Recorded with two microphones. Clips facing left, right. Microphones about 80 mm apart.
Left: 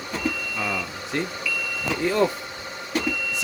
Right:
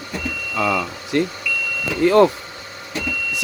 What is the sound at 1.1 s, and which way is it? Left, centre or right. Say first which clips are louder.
Speech: right 7 dB; right.